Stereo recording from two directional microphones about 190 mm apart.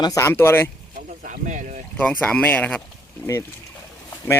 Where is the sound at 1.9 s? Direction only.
5° left (ahead or behind).